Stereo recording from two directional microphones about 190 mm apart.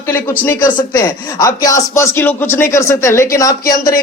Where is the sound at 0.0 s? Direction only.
10° left (ahead or behind).